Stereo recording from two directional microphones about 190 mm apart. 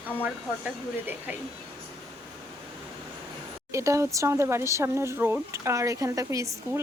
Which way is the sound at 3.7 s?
15° right (ahead or behind).